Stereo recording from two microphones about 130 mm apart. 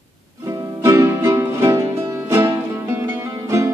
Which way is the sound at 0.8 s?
25° right (ahead or behind).